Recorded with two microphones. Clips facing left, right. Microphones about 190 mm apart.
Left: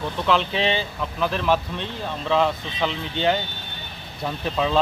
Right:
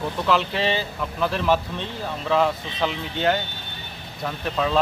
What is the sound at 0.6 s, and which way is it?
Speech, 20° left (ahead or behind).